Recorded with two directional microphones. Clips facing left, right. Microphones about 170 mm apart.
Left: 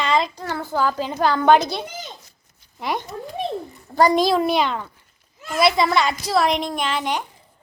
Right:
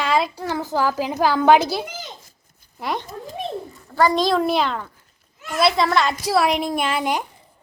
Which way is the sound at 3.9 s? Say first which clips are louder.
Left 2 dB; 15° left (ahead or behind).